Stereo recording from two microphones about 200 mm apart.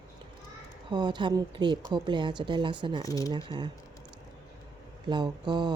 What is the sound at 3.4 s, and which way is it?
Speech, 25° right (ahead or behind).